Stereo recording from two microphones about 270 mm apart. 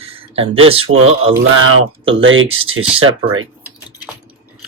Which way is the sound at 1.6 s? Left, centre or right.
Right.